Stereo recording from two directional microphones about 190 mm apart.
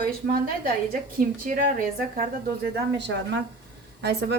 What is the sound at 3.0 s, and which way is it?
Speech, 65° right (ahead or behind).